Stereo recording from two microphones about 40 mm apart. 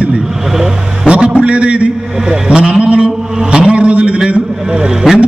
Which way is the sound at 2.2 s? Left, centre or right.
Centre.